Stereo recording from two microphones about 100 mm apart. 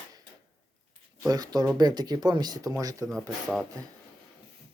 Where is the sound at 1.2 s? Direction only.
40° right (ahead or behind).